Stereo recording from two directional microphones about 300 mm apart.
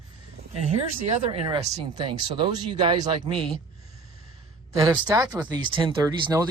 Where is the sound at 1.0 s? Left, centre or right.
Right.